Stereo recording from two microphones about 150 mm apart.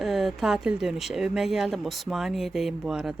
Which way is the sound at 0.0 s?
Centre (ahead or behind).